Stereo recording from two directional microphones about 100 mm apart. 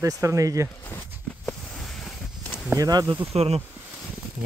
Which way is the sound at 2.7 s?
35° right (ahead or behind).